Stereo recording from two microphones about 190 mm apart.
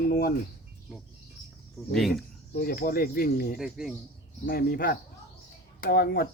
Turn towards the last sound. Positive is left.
turn(degrees=55)  # may be behind; listen again after turning